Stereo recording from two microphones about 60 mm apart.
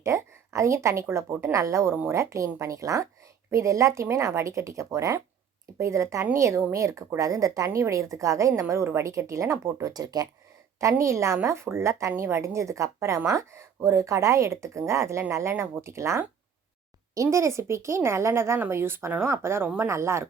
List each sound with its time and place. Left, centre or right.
0.0 s a woman's voice: right
1.3 s a woman's voice: right
1.5 s a woman's voice: right
7.2 s a woman's voice: right
10.8 s a woman's voice: right
17.2 s a woman's voice: right